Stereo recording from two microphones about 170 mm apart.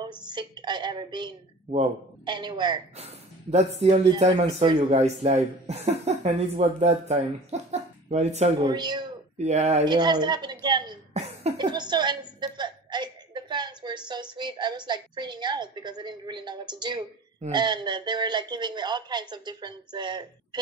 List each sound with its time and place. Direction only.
0.3 s speech: 25° right (ahead or behind)
3.0 s speech: 40° right (ahead or behind)
8.6 s speech: 25° right (ahead or behind)
9.4 s speech: 40° right (ahead or behind)
9.8 s a woman's voice: 25° right (ahead or behind)